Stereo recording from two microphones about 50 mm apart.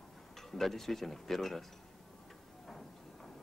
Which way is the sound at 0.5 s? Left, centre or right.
Centre.